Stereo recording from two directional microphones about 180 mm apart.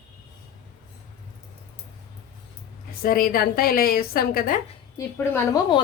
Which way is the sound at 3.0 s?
55° left (ahead or behind).